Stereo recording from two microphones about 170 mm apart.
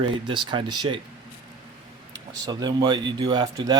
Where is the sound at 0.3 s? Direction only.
30° right (ahead or behind).